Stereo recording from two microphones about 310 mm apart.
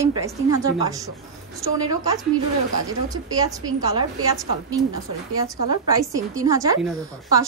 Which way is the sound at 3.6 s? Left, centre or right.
Centre.